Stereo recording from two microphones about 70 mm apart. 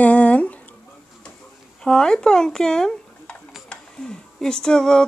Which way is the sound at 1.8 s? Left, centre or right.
Centre.